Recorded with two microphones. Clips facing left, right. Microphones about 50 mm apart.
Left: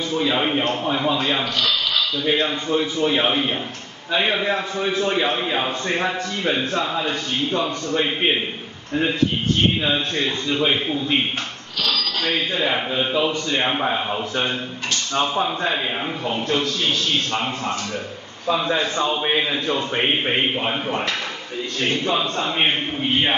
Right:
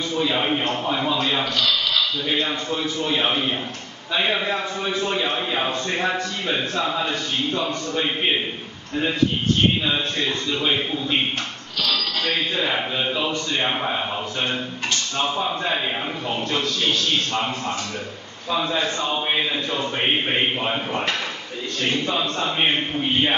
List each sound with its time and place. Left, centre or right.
0.2 s a man's voice: centre
1.0 s a man's voice: centre
5.3 s a man's voice: centre
5.9 s a man's voice: centre
7.9 s a man's voice: centre
9.8 s a man's voice: centre
12.5 s a man's voice: centre
15.4 s a man's voice: centre
22.0 s a man's voice: left